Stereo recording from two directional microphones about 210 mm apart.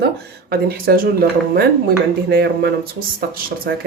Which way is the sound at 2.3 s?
50° right (ahead or behind).